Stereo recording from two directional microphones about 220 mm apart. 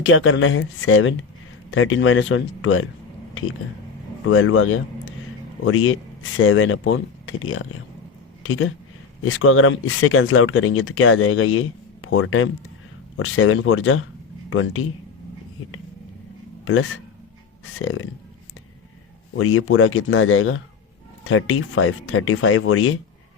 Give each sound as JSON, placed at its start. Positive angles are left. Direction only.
{"t": 0.0, "sound": "speech", "side_deg": 60}
{"t": 4.3, "sound": "speech", "side_deg": 65}
{"t": 16.6, "sound": "speech", "side_deg": 65}
{"t": 19.4, "sound": "speech", "side_deg": 70}